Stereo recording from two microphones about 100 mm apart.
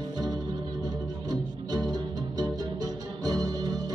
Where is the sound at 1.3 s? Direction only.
40° right (ahead or behind).